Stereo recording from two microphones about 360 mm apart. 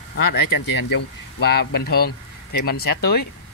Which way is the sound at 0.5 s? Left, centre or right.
Left.